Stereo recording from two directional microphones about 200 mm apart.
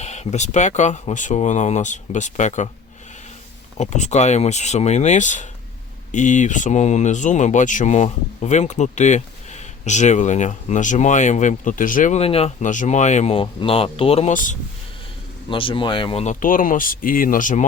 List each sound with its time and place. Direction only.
0.0 s speech: 35° left (ahead or behind)
3.8 s speech: 35° left (ahead or behind)
15.4 s speech: 25° left (ahead or behind)